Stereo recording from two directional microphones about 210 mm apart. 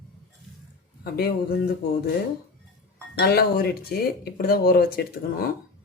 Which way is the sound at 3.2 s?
45° left (ahead or behind).